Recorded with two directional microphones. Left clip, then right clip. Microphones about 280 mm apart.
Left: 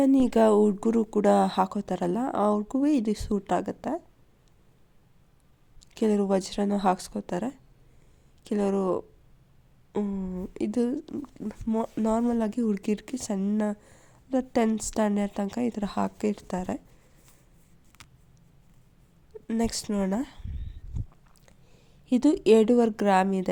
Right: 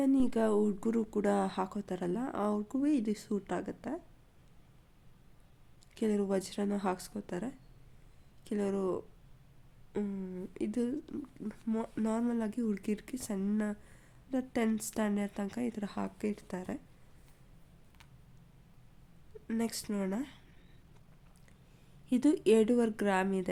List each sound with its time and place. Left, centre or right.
0.0 s speech: left
5.9 s speech: centre
19.5 s speech: centre
20.9 s a sound: centre
22.0 s speech: centre